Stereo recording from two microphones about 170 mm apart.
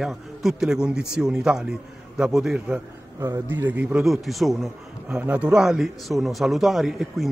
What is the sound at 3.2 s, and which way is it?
Speech, 20° right (ahead or behind).